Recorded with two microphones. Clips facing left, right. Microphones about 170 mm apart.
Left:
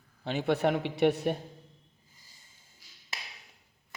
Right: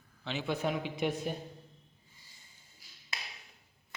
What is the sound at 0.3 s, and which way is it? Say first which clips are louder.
Speech: left 6 dB; 55° left (ahead or behind).